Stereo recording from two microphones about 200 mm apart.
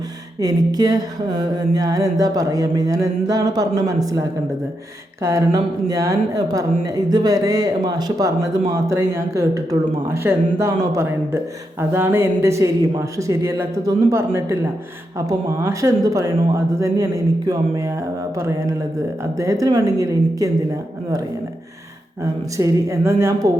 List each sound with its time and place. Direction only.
0.3 s speech: 20° right (ahead or behind)
22.2 s speech: 15° right (ahead or behind)